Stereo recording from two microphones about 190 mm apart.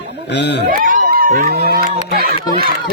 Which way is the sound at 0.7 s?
45° right (ahead or behind).